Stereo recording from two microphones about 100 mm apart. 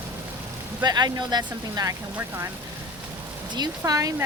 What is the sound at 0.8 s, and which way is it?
Speech, 45° right (ahead or behind).